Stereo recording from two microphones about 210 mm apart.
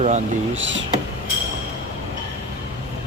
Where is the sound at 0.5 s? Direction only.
60° right (ahead or behind).